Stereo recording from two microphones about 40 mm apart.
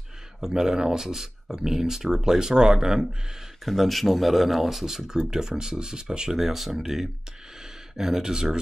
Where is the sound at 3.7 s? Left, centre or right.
Centre.